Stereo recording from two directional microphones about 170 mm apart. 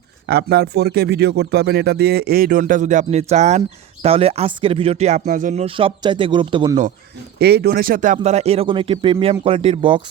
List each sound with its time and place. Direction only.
0.3 s speech: 65° right (ahead or behind); by 5.6 s 50° right (ahead or behind)
5.6 s a man's voice: 30° right (ahead or behind)
7.3 s speech: 70° right (ahead or behind); by 10.0 s 30° right (ahead or behind)